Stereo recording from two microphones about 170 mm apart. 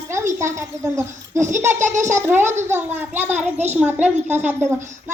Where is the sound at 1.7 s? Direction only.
45° right (ahead or behind).